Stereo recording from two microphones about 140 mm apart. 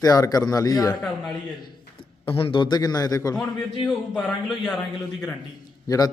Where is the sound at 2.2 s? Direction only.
40° left (ahead or behind).